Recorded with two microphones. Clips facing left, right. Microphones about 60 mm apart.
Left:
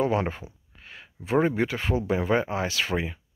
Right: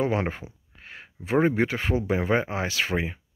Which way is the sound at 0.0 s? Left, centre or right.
Right.